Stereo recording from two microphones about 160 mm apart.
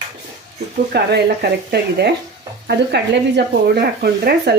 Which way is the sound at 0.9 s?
85° right.